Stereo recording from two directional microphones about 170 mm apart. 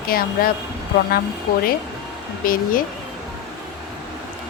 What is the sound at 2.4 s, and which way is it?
Speech, 55° left (ahead or behind).